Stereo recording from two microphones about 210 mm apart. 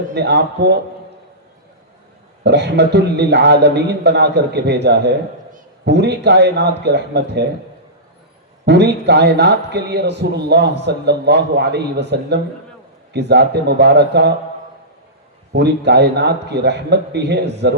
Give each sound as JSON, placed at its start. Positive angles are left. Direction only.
{"t": 0.1, "sound": "a man's voice", "side_deg": -55}
{"t": 2.4, "sound": "a man's voice", "side_deg": -55}
{"t": 8.6, "sound": "a man's voice", "side_deg": -55}
{"t": 15.5, "sound": "a man's voice", "side_deg": -55}